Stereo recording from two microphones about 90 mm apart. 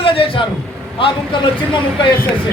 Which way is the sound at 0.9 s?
65° left (ahead or behind).